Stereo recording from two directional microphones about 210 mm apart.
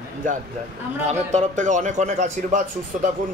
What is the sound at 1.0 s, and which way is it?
A man's voice, 35° right (ahead or behind).